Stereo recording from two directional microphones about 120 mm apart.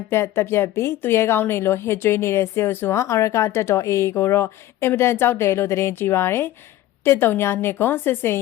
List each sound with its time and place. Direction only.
0.1 s a woman's voice: 20° left (ahead or behind)